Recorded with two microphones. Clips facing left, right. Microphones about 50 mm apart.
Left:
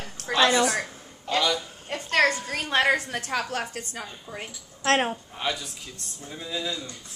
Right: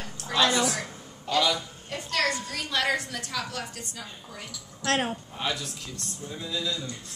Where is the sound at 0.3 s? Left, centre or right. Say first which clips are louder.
Left 3 dB; left.